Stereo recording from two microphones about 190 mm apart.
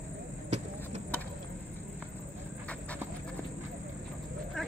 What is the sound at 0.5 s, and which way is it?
Vehicle, 35° right (ahead or behind).